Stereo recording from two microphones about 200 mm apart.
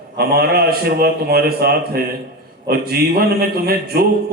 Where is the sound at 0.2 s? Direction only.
50° right (ahead or behind).